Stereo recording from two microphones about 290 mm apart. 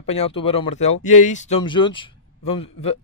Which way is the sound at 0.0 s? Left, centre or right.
Left.